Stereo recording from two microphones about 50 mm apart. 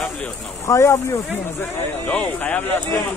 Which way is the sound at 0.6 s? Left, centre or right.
Left.